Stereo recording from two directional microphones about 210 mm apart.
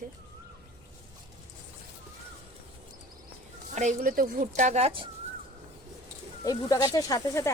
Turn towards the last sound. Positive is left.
turn(degrees=15)  # may be behind; listen again after turning